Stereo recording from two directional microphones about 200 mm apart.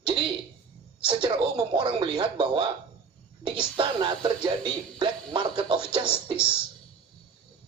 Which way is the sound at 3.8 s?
25° right (ahead or behind).